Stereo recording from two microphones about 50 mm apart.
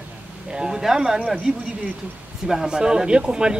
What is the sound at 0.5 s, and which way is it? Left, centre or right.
Speech, centre.